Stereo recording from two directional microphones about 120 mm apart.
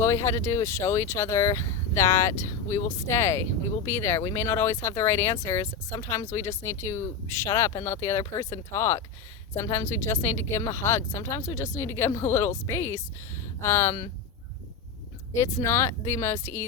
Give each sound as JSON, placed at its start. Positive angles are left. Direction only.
{"t": 0.0, "sound": "speech", "side_deg": 20}
{"t": 15.4, "sound": "speech", "side_deg": 25}